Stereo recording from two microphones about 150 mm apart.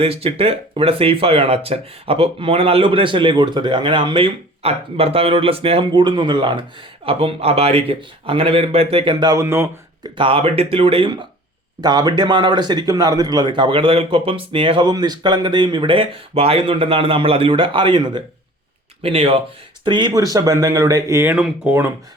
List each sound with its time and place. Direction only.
0.0 s speech: 40° right (ahead or behind); by 9.6 s 15° right (ahead or behind)
10.0 s speech: 35° right (ahead or behind); by 21.3 s 15° right (ahead or behind)
21.3 s speech: 5° right (ahead or behind)